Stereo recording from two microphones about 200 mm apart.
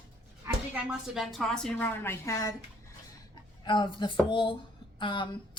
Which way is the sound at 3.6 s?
25° left (ahead or behind).